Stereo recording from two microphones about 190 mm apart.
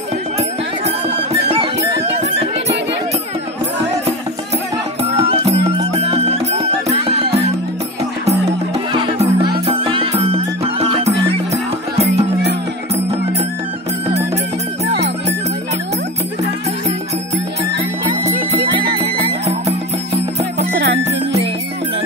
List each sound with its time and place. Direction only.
1.1 s music: 30° right (ahead or behind)
5.4 s music: 30° right (ahead or behind)
18.7 s music: 55° right (ahead or behind)
20.5 s music: 65° right (ahead or behind)